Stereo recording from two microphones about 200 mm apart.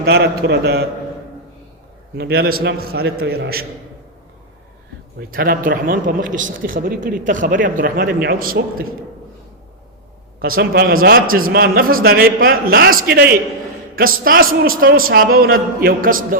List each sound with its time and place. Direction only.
0.0 s a man's voice: 55° right (ahead or behind)
2.1 s a man's voice: 55° right (ahead or behind)
5.3 s a man's voice: 45° right (ahead or behind)
10.4 s a man's voice: 45° right (ahead or behind)